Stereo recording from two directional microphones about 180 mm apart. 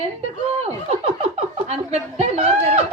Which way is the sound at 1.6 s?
35° right (ahead or behind).